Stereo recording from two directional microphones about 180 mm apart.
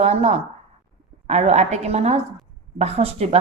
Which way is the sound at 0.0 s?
40° right (ahead or behind).